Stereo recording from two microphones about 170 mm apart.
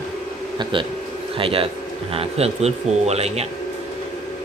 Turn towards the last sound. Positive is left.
turn(degrees=-40)  # may be behind; listen again after turning